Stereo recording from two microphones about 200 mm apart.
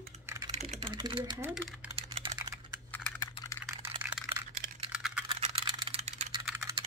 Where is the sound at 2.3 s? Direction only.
15° right (ahead or behind).